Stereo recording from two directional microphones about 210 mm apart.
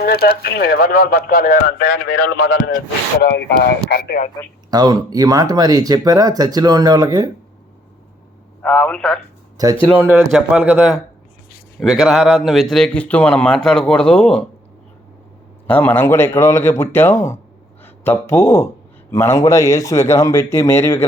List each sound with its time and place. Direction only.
0.0 s speech: 50° left (ahead or behind)
4.7 s speech: 20° right (ahead or behind)
8.6 s a man's voice: 5° left (ahead or behind)
9.8 s a man's voice: 5° right (ahead or behind)
15.6 s a man's voice: 10° left (ahead or behind)